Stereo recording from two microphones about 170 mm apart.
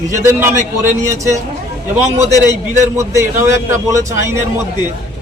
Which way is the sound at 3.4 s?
15° right (ahead or behind).